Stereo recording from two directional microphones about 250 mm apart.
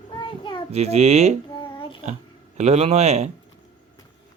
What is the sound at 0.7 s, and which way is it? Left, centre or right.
Speech, right.